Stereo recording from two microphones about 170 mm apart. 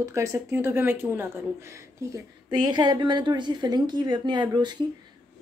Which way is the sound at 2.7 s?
25° right (ahead or behind).